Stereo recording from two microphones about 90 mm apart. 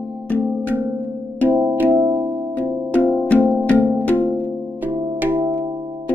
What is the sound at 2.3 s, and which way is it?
Music, 10° right (ahead or behind).